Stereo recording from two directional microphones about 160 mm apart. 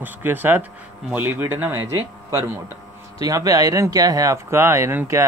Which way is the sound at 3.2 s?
20° right (ahead or behind).